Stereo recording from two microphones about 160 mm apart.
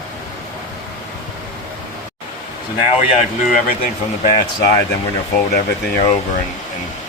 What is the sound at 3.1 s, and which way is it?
Speech, 55° left (ahead or behind).